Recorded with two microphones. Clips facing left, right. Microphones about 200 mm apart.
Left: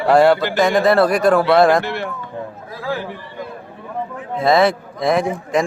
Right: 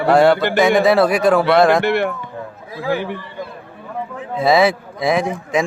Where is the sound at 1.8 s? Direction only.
65° right (ahead or behind).